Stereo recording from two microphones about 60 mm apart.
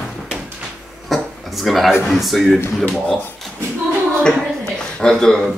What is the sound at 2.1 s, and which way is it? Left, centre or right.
Speech, centre.